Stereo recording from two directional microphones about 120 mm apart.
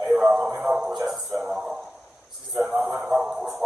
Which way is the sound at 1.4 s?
5° right (ahead or behind).